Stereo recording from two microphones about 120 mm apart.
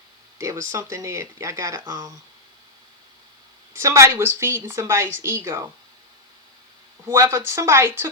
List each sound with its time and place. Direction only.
0.3 s speech: 25° right (ahead or behind)
3.8 s speech: 25° right (ahead or behind)
7.0 s speech: 25° right (ahead or behind)